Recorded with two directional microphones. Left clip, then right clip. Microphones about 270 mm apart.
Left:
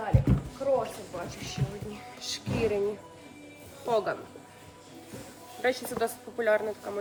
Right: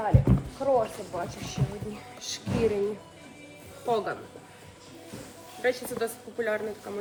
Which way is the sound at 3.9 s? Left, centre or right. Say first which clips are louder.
Even; centre.